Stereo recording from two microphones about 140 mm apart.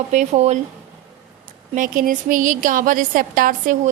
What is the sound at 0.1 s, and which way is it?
Speech, 55° right (ahead or behind).